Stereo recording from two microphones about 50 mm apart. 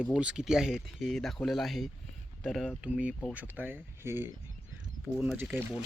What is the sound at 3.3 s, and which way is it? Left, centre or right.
Speech, right.